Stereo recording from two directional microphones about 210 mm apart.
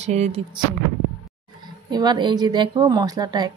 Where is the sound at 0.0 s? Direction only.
30° right (ahead or behind).